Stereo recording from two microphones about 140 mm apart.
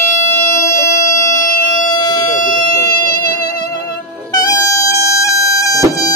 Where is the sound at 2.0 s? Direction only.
30° left (ahead or behind).